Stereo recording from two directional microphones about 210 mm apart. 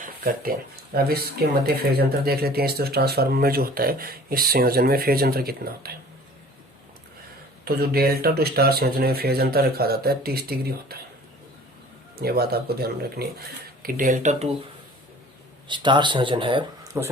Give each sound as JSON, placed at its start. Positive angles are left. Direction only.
{"t": 0.0, "sound": "a sound", "side_deg": -45}
{"t": 0.9, "sound": "speech", "side_deg": -45}
{"t": 7.6, "sound": "speech", "side_deg": -50}
{"t": 12.1, "sound": "speech", "side_deg": -45}
{"t": 15.7, "sound": "speech", "side_deg": -20}